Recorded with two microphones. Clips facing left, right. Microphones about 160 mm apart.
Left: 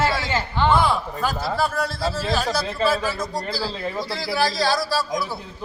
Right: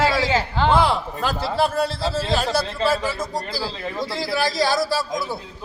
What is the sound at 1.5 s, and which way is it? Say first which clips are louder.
A man's voice: right 3 dB; 25° right (ahead or behind).